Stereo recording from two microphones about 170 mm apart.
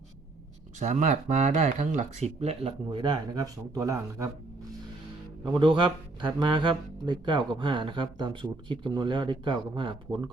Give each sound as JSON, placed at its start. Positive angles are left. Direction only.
{"t": 0.8, "sound": "speech", "side_deg": -45}
{"t": 5.5, "sound": "speech", "side_deg": -25}